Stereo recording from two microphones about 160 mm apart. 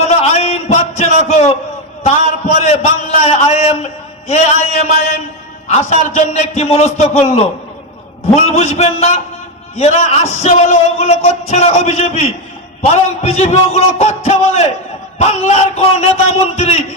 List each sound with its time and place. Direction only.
0.0 s a sound: 45° left (ahead or behind)
2.2 s a man's voice: 45° left (ahead or behind)
8.4 s a man's voice: 40° left (ahead or behind)